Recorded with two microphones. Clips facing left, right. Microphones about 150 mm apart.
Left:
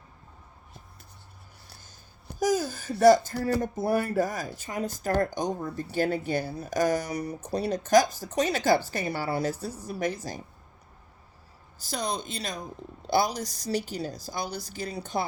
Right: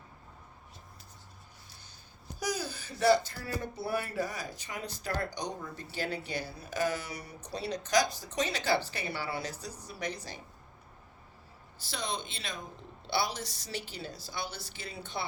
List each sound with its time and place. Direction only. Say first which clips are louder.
2.4 s speech: left 9 dB; 45° left (ahead or behind)
11.8 s a woman's voice: left 5 dB; 45° left (ahead or behind)